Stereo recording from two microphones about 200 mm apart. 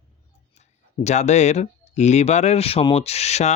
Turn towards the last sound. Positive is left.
turn(degrees=35)  # may be behind; listen again after turning